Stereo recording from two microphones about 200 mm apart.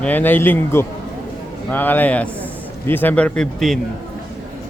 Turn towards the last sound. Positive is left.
turn(degrees=0)  # may be behind; listen again after turning